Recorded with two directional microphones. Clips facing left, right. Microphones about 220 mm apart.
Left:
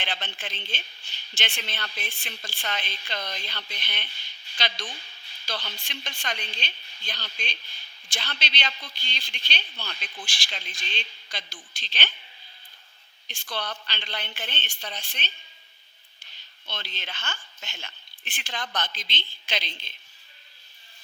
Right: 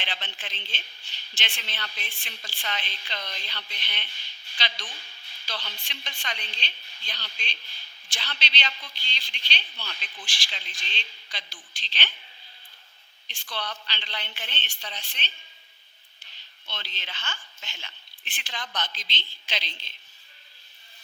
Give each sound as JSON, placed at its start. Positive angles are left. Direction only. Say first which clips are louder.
{"t": 0.0, "sound": "speech", "louder": "left 3 dB", "side_deg": 45}
{"t": 13.2, "sound": "speech", "louder": "left 2 dB", "side_deg": 45}
{"t": 16.6, "sound": "speech", "louder": "left 3 dB", "side_deg": 50}